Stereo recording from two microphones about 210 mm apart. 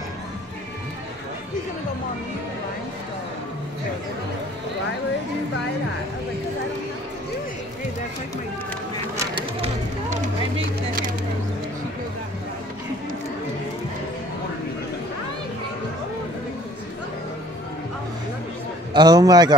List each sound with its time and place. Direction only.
9.1 s a sound: 15° right (ahead or behind)
9.6 s run: 35° right (ahead or behind)
18.9 s a man's voice: 20° right (ahead or behind)